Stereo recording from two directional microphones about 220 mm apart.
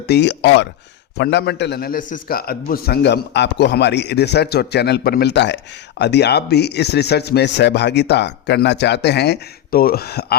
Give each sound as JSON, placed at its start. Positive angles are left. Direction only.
{"t": 0.1, "sound": "a man's voice", "side_deg": 50}